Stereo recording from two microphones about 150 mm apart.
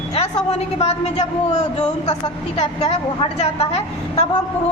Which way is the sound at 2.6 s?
45° left (ahead or behind).